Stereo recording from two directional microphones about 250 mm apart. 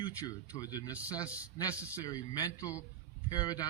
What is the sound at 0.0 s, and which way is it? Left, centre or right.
A man's voice, centre.